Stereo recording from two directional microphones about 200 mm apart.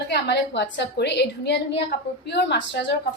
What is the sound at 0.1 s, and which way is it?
A woman's voice, 60° left (ahead or behind).